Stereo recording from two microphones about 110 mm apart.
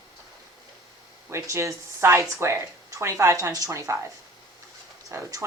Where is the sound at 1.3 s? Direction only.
25° right (ahead or behind).